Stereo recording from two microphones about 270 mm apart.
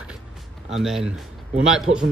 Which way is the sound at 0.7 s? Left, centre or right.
Centre.